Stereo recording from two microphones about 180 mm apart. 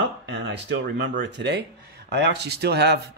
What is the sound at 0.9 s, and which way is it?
Speech, 75° right (ahead or behind).